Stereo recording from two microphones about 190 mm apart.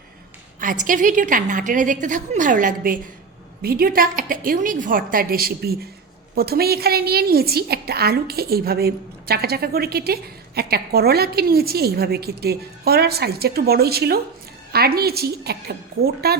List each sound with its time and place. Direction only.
0.6 s a woman's voice: 45° right (ahead or behind)